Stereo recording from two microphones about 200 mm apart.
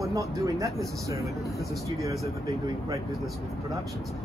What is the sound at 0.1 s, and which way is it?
Speech, 15° right (ahead or behind).